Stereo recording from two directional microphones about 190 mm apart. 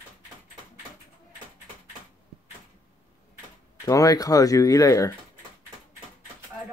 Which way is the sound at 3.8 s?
20° left (ahead or behind).